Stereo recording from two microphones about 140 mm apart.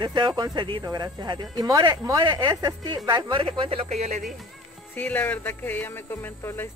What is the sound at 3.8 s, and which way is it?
Speech, 55° right (ahead or behind).